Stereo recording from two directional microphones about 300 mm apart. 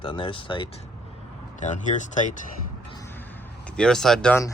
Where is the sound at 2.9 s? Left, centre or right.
Centre.